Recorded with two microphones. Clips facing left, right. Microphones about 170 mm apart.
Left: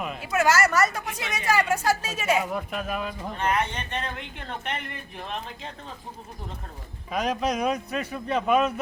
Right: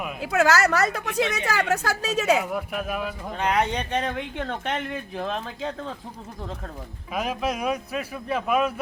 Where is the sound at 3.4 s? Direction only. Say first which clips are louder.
Right 3 dB; 80° right.